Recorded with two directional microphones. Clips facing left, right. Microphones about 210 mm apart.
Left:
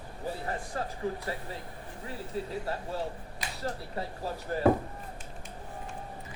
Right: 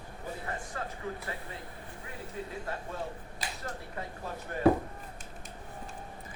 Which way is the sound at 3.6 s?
35° left (ahead or behind).